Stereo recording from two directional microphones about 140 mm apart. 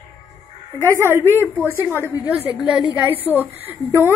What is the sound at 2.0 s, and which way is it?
Speech, 15° left (ahead or behind).